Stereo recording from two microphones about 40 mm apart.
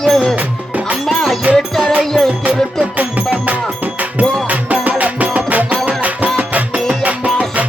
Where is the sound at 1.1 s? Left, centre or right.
Centre.